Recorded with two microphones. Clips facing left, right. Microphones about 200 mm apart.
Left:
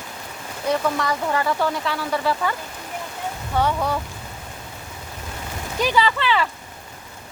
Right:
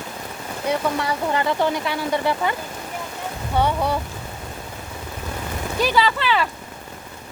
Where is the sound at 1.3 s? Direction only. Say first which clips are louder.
Right 3 dB; 25° right (ahead or behind).